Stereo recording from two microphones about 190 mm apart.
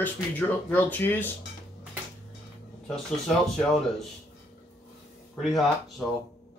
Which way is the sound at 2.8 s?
Centre (ahead or behind).